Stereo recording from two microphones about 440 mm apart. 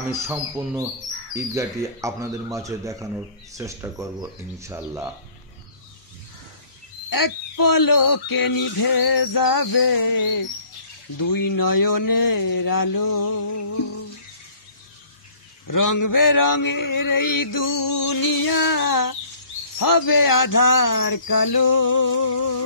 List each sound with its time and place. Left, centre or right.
0.0 s speech: centre
7.1 s mantra: left
15.6 s mantra: left